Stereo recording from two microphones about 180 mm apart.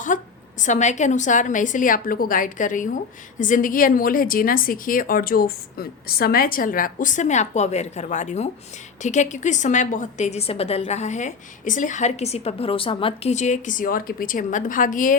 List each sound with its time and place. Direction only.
0.1 s a woman's voice: 45° left (ahead or behind); by 13.3 s 30° left (ahead or behind)
13.3 s a woman's voice: 40° left (ahead or behind)